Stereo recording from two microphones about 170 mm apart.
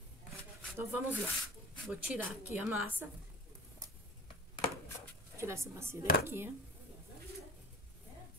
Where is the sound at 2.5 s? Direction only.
10° right (ahead or behind).